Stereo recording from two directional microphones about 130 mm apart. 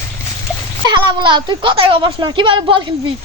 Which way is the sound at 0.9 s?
35° right (ahead or behind).